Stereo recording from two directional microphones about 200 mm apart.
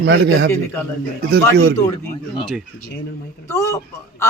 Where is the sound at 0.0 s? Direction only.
60° right (ahead or behind).